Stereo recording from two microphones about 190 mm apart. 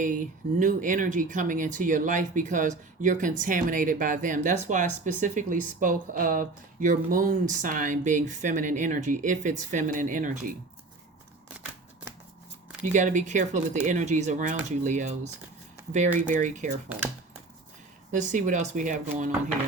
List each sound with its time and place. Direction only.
0.0 s speech: 45° right (ahead or behind)
12.8 s speech: 40° right (ahead or behind)
18.1 s speech: 40° right (ahead or behind)